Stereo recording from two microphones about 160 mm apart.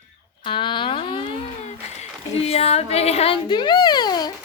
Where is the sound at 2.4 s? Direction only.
40° left (ahead or behind).